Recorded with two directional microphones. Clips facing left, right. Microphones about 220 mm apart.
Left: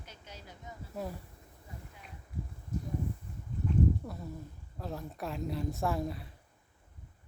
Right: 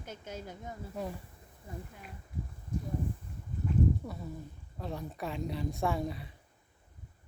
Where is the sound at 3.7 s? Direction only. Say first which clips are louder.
Even; centre (ahead or behind).